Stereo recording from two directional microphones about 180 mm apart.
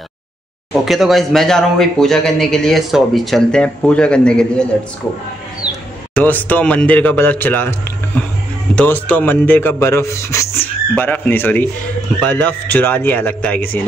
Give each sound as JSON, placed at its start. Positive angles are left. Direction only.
{"t": 0.8, "sound": "a man's voice", "side_deg": 0}
{"t": 6.1, "sound": "speech", "side_deg": 10}
{"t": 8.7, "sound": "speech", "side_deg": 10}